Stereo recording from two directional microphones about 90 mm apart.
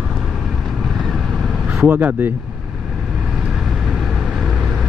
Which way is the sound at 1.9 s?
20° right (ahead or behind).